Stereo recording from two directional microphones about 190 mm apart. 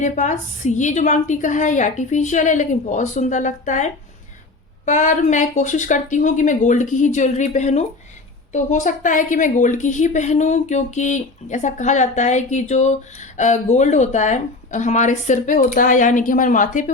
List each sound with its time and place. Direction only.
0.0 s a woman's voice: 40° left (ahead or behind)
4.9 s a woman's voice: 40° left (ahead or behind)